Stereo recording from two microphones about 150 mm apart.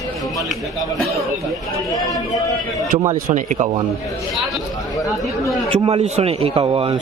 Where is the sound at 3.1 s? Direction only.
55° right (ahead or behind).